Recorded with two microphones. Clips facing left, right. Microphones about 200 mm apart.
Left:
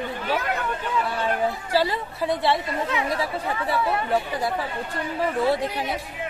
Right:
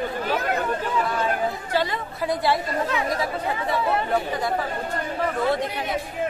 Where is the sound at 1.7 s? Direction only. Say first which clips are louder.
Left 2 dB; 35° left (ahead or behind).